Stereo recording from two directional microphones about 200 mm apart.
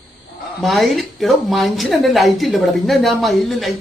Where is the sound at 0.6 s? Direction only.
Centre (ahead or behind).